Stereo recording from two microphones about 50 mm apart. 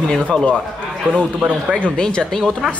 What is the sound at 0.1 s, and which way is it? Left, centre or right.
Speech, centre.